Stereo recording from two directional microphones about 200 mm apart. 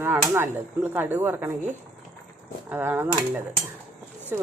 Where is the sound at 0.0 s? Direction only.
10° right (ahead or behind).